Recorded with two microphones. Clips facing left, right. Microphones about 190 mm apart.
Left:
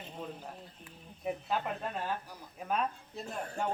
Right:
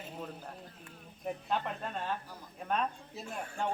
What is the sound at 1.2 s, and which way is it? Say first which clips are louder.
Speech: left 1 dB; 5° left (ahead or behind).